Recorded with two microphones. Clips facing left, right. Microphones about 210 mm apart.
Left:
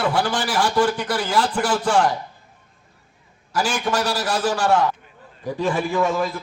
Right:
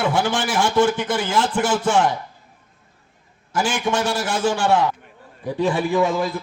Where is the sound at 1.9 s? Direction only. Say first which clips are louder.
Left 2 dB; 5° right (ahead or behind).